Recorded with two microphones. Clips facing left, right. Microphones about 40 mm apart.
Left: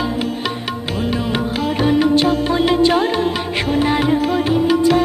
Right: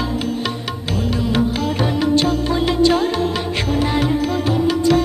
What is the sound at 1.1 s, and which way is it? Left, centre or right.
Music, centre.